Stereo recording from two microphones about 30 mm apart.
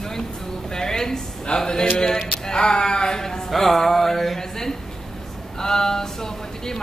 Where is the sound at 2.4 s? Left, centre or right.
Left.